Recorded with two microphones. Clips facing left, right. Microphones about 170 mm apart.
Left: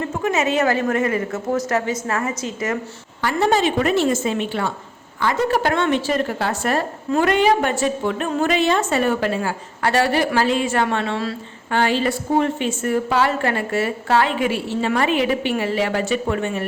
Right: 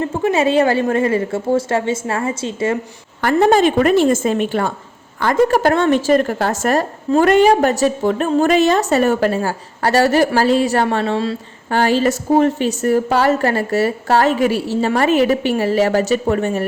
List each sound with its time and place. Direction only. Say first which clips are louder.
0.0 s a woman's voice: right 5 dB; 30° right (ahead or behind)
3.2 s a woman's voice: right 6 dB; 50° right (ahead or behind); by 11.3 s 30° right (ahead or behind)
11.7 s a woman's voice: right 4 dB; 40° right (ahead or behind)